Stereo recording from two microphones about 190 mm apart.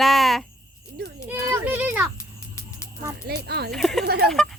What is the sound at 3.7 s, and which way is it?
Speech, centre (ahead or behind).